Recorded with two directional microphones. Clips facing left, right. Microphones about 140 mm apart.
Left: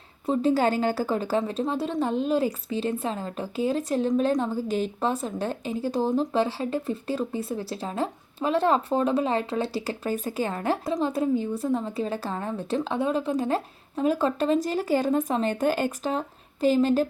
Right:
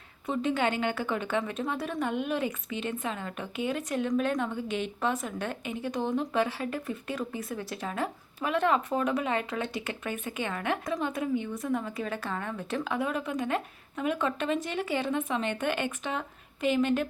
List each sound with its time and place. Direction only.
0.3 s a woman's voice: 35° left (ahead or behind)